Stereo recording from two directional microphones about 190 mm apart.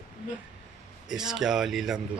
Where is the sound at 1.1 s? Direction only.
Centre (ahead or behind).